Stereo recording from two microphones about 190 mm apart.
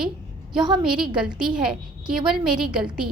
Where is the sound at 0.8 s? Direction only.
5° right (ahead or behind).